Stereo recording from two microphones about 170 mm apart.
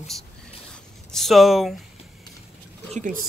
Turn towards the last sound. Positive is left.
turn(degrees=-50)  # may be behind; listen again after turning